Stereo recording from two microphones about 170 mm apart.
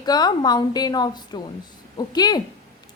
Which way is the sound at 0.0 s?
25° left (ahead or behind).